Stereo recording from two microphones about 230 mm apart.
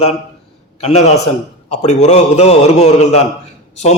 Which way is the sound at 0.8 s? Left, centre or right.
Left.